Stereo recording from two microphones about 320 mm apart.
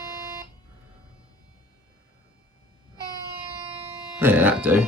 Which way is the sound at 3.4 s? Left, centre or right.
Centre.